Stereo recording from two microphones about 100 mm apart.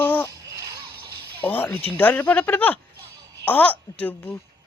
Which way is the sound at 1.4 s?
20° left (ahead or behind).